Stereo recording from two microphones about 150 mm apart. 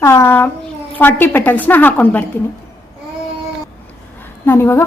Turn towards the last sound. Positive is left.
turn(degrees=15)  # may be behind; listen again after turning